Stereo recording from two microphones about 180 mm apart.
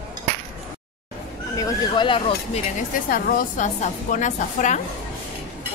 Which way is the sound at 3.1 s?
50° left (ahead or behind).